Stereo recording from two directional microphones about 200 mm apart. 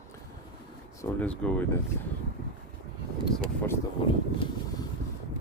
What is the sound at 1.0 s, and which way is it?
Speech, 5° left (ahead or behind).